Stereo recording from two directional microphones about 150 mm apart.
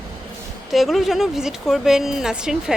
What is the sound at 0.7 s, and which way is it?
A woman's voice, centre (ahead or behind).